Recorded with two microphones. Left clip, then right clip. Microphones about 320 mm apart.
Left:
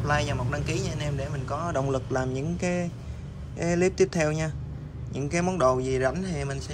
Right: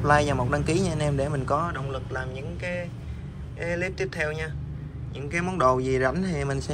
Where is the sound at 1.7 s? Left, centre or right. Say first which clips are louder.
Left 5 dB; left.